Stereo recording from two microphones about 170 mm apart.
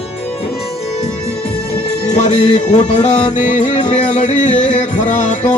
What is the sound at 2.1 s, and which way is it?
Music, 40° left (ahead or behind).